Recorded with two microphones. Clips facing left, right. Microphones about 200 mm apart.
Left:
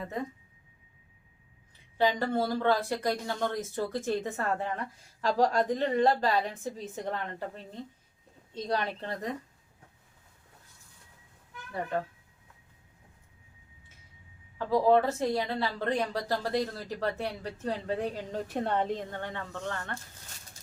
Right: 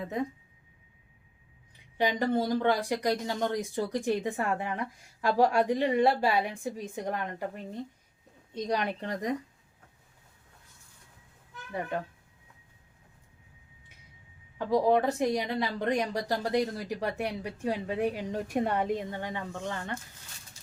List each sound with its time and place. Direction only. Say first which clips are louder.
2.0 s a woman's voice: even; 15° right (ahead or behind)
14.6 s a woman's voice: left 1 dB; 15° right (ahead or behind)